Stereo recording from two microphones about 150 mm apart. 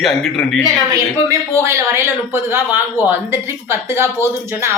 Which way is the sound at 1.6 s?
15° right (ahead or behind).